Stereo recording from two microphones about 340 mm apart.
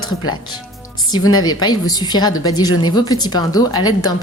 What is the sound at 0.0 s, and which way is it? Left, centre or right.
A woman's voice, centre.